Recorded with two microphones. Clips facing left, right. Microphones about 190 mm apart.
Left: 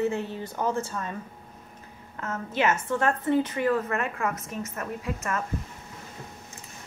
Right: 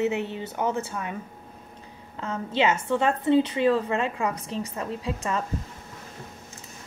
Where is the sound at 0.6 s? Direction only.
20° right (ahead or behind).